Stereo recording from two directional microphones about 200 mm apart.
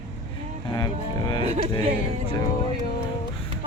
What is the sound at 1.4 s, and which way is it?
Speech, 30° right (ahead or behind).